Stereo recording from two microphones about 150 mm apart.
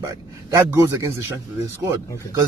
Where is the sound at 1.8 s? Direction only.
25° right (ahead or behind).